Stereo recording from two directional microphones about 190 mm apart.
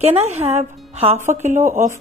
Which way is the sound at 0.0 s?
35° right (ahead or behind).